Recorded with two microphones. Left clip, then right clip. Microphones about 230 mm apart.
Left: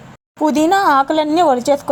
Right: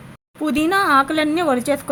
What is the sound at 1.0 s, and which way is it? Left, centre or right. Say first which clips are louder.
Speech: left 5 dB; centre.